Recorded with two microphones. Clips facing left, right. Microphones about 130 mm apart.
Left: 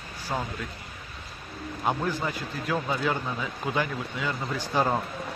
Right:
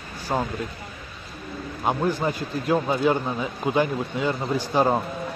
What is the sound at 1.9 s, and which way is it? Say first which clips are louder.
Speech: right 5 dB; 25° right (ahead or behind).